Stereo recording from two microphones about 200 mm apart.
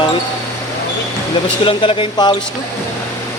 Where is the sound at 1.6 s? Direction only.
25° left (ahead or behind).